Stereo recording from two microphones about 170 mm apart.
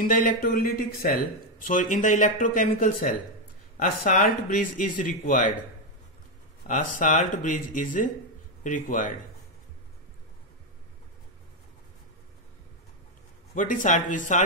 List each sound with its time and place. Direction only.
0.0 s speech: 55° left (ahead or behind)
6.7 s speech: 50° left (ahead or behind)
13.6 s speech: 50° left (ahead or behind)